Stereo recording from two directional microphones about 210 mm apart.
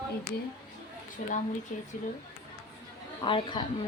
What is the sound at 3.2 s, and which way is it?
Speech, 25° left (ahead or behind).